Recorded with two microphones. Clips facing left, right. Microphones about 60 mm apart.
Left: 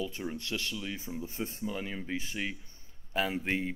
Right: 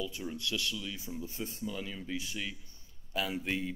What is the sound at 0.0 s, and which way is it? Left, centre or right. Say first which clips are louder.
Speech: left 2 dB; left.